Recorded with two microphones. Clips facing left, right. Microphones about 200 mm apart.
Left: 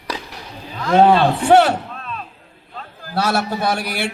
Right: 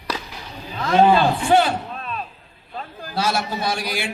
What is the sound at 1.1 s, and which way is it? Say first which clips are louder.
Speech: left 3 dB; 70° left (ahead or behind).